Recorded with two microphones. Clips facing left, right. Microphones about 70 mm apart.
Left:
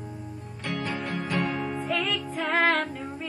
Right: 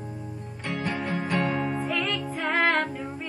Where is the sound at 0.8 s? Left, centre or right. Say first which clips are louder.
Right 4 dB; centre.